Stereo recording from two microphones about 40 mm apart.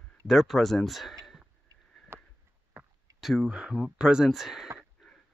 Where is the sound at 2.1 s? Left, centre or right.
Right.